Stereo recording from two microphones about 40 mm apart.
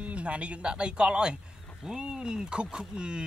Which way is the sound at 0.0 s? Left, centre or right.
Right.